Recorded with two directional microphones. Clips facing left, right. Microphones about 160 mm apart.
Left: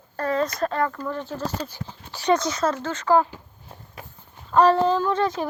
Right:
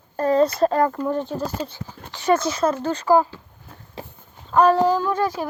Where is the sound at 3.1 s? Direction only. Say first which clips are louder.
Right 2 dB; 10° right (ahead or behind).